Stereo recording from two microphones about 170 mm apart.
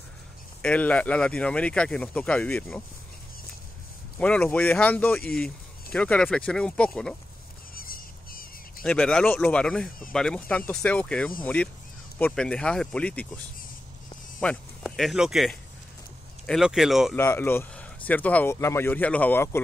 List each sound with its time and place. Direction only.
0.6 s speech: 10° left (ahead or behind)
4.2 s speech: 5° left (ahead or behind)
7.7 s a sound: 60° left (ahead or behind)
8.8 s speech: 5° left (ahead or behind)
14.4 s speech: 10° left (ahead or behind)
14.8 s speech: centre (ahead or behind)
17.1 s speech: 10° left (ahead or behind)